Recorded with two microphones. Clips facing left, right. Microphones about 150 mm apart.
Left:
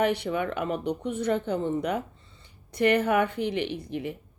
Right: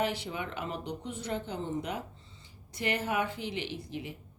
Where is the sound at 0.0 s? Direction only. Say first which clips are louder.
Left 7 dB; 60° left (ahead or behind).